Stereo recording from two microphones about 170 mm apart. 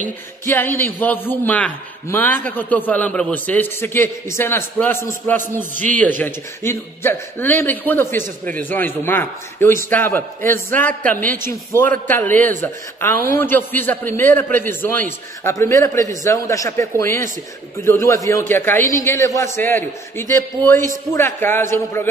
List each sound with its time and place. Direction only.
0.5 s a man's voice: 15° left (ahead or behind)